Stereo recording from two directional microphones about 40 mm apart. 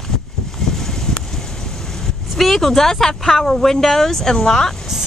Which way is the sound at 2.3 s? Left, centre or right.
Centre.